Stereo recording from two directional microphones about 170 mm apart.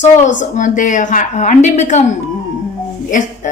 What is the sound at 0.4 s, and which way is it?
A woman's voice, 50° left (ahead or behind).